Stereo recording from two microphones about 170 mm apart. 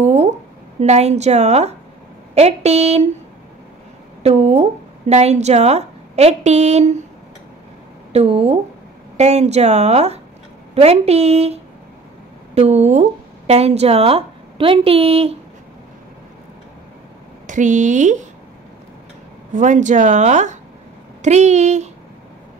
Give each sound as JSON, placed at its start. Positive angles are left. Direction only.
{"t": 0.0, "sound": "a sound", "side_deg": -40}
{"t": 0.7, "sound": "a woman's voice", "side_deg": -40}
{"t": 4.2, "sound": "a woman's voice", "side_deg": -40}
{"t": 8.1, "sound": "a woman's voice", "side_deg": -35}
{"t": 17.5, "sound": "speech", "side_deg": -45}
{"t": 19.5, "sound": "speech", "side_deg": -45}